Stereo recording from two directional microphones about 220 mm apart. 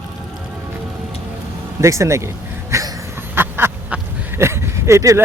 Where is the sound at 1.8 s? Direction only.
15° right (ahead or behind).